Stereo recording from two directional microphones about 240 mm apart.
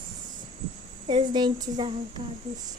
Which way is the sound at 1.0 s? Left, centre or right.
Centre.